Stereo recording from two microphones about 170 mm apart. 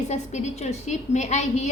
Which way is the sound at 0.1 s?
40° left (ahead or behind).